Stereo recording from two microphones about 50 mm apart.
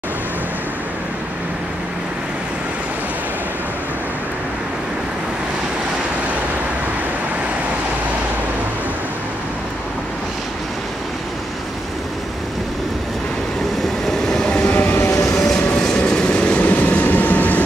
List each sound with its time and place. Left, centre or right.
14.2 s train: centre
14.6 s vehicle: left
15.0 s vehicle: left
15.3 s train: centre
15.7 s vehicle: centre; by 17.6 s left